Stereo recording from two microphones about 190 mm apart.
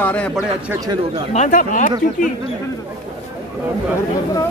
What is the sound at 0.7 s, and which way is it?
Speech, 20° right (ahead or behind).